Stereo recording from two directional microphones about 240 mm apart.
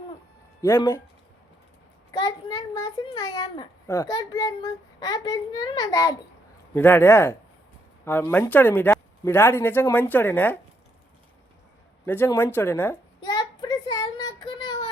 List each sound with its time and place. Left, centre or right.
0.6 s speech: centre
2.1 s a child's voice: centre
12.0 s a sound: centre